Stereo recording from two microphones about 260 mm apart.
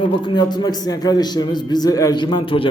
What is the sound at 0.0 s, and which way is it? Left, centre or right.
A man's voice, centre.